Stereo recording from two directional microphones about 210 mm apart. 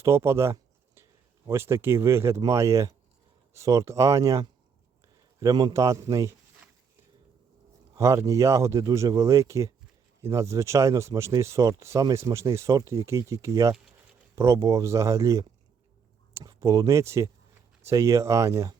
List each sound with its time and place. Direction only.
0.0 s a sound: 10° right (ahead or behind)
1.5 s speech: 10° right (ahead or behind)
7.9 s speech: 15° right (ahead or behind)